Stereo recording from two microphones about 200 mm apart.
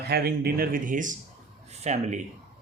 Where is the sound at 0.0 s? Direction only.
50° right (ahead or behind); by 2.2 s 35° right (ahead or behind).